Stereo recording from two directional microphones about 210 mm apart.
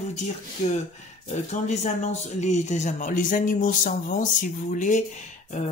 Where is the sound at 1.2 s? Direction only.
30° left (ahead or behind).